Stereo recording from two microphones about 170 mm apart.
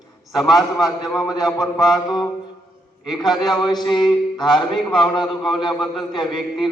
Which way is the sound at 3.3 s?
25° left (ahead or behind).